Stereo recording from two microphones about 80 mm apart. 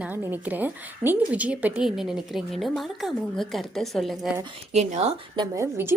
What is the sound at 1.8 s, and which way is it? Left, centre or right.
A woman's voice, centre.